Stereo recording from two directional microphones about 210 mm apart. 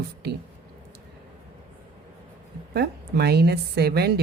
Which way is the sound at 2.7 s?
50° right (ahead or behind).